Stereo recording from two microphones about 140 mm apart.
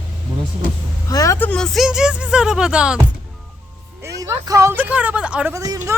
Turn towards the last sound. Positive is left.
turn(degrees=-25)  # may be behind; listen again after turning